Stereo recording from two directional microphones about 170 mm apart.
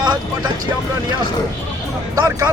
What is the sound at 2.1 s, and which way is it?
Speech, 20° right (ahead or behind).